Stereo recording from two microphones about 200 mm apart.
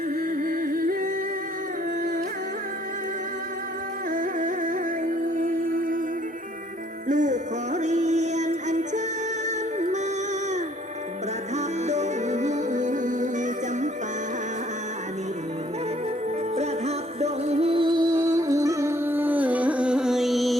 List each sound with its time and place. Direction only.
0.4 s humming: 45° right (ahead or behind)
4.1 s music: 40° right (ahead or behind)
7.1 s music: 40° right (ahead or behind)
11.5 s music: 35° right (ahead or behind)
16.6 s music: 35° right (ahead or behind); by 20.6 s centre (ahead or behind)